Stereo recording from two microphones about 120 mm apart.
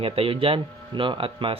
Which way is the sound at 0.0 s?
50° right (ahead or behind).